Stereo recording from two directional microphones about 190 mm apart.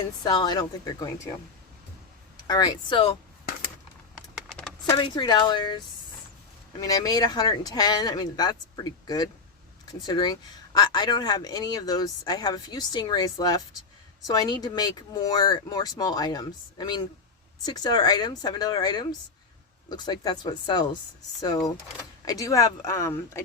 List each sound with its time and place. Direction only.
0.2 s speech: 25° left (ahead or behind)
2.5 s speech: 20° left (ahead or behind)
4.4 s typing: 5° left (ahead or behind)
4.9 s speech: 25° left (ahead or behind)